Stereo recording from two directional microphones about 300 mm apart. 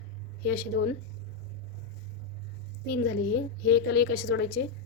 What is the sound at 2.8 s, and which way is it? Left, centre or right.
A woman's voice, left.